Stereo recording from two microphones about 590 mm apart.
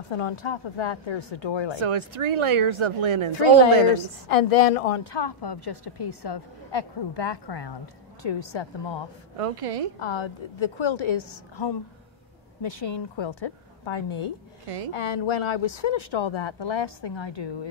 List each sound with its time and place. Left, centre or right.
0.1 s a woman's voice: left
1.8 s speech: right
3.9 s a woman's voice: left
5.1 s a woman's voice: left
9.4 s a woman's voice: right
9.9 s a woman's voice: left